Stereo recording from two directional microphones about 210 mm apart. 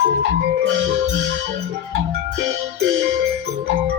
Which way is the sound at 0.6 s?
60° right (ahead or behind).